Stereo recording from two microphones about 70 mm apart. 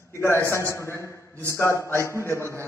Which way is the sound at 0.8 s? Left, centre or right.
Left.